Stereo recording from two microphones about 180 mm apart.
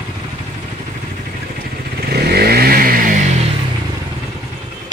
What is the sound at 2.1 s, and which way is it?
Vehicle, 60° right (ahead or behind).